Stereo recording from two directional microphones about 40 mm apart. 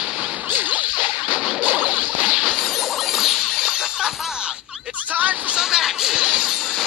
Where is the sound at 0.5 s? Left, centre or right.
Right.